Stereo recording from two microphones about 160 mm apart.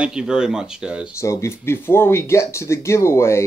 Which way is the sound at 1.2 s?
20° left (ahead or behind).